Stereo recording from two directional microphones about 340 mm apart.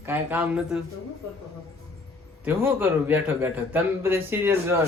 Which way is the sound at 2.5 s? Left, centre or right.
Centre.